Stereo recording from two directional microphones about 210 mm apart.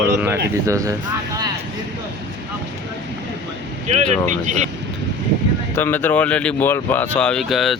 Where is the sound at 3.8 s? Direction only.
35° right (ahead or behind).